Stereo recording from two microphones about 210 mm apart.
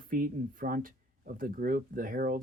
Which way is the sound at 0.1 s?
40° right (ahead or behind).